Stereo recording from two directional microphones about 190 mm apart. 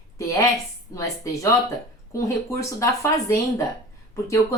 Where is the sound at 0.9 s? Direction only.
15° left (ahead or behind).